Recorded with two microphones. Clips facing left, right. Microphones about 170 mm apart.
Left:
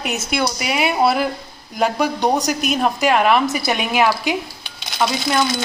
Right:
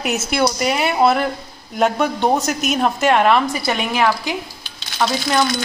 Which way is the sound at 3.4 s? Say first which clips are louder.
Left 1 dB; 20° left (ahead or behind).